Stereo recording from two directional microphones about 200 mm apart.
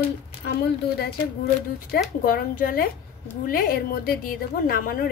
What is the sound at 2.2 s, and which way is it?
Speech, 45° left (ahead or behind).